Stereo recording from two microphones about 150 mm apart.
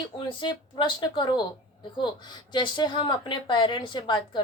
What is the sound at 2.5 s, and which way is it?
Speech, 30° left (ahead or behind).